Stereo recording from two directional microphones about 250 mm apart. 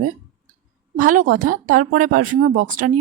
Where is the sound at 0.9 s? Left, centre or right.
Right.